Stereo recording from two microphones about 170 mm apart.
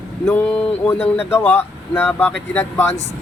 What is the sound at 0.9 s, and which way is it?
Speech, 15° left (ahead or behind).